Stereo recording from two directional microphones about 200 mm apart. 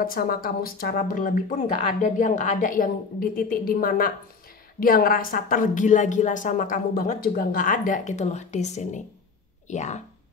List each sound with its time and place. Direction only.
0.0 s a woman's voice: 45° left (ahead or behind)